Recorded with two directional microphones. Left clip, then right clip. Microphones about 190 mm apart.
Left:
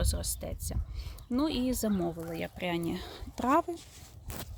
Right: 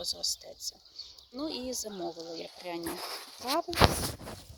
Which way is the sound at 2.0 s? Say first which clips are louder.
Left 3 dB; 5° left (ahead or behind).